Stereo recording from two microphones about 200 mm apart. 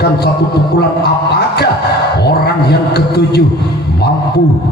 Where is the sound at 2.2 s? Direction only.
55° left (ahead or behind).